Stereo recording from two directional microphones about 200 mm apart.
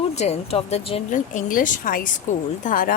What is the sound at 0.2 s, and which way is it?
A woman's voice, 30° left (ahead or behind).